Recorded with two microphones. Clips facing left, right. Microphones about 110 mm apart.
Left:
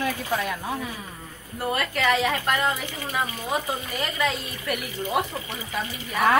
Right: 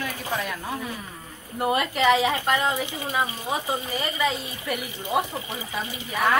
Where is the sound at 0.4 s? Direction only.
20° left (ahead or behind).